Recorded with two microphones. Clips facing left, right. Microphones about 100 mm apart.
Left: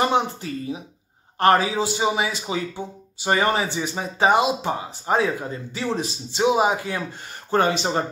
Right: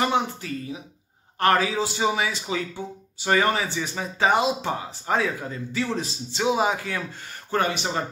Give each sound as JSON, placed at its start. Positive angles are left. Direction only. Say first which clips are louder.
{"t": 0.0, "sound": "a man's voice", "louder": "left 3 dB", "side_deg": 25}